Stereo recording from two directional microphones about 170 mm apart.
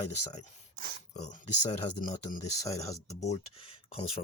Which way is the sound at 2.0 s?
50° left (ahead or behind).